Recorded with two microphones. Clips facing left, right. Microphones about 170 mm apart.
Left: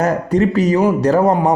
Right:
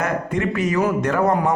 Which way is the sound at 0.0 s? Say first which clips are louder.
Left 7 dB; 35° left (ahead or behind).